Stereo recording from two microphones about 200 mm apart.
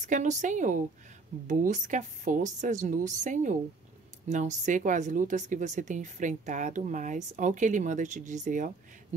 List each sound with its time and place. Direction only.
0.0 s speech: 40° right (ahead or behind)